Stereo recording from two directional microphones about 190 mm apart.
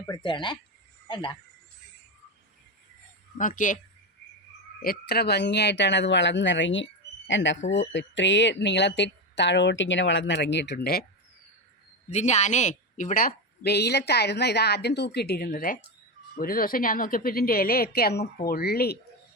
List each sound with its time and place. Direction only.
0.0 s speech: 25° left (ahead or behind)
3.3 s a woman's voice: 45° left (ahead or behind)
4.8 s speech: 55° left (ahead or behind)
12.1 s a woman's voice: 35° left (ahead or behind); by 18.9 s 55° left (ahead or behind)